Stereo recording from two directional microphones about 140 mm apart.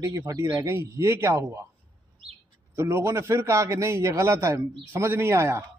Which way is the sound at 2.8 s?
20° right (ahead or behind).